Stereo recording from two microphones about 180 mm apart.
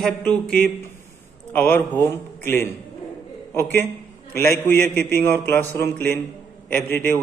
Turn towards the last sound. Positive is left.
turn(degrees=10)  # may be behind; listen again after turning